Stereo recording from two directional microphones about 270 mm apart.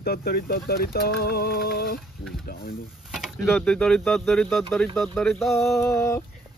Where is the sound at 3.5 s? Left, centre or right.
Centre.